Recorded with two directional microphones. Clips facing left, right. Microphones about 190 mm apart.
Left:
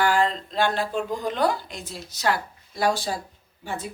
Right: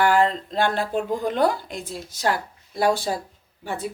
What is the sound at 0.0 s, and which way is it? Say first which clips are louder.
Speech: right 3 dB; 55° right (ahead or behind).